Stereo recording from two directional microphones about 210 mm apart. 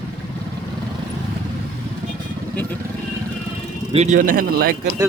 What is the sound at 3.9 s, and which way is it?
Speech, 35° right (ahead or behind).